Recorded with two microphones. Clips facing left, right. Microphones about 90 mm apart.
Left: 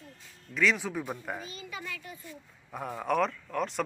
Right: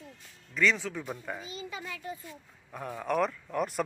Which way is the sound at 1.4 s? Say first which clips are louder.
Right 1 dB; 25° right (ahead or behind).